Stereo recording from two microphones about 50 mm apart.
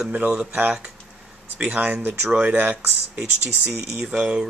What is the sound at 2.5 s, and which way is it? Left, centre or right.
Speech, right.